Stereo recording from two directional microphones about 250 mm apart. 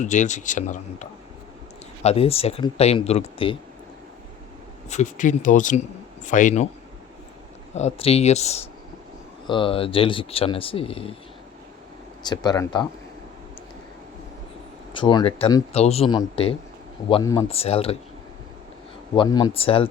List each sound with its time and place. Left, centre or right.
0.0 s speech: left
2.0 s speech: left
4.9 s speech: left
7.8 s speech: left
12.2 s speech: centre
14.9 s speech: centre
19.1 s speech: centre